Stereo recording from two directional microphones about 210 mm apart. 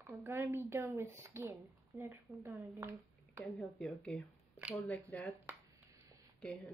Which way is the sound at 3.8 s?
Centre (ahead or behind).